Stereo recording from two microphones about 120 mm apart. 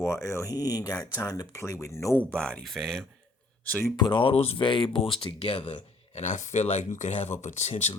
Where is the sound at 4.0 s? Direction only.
40° left (ahead or behind); by 7.7 s 75° left (ahead or behind).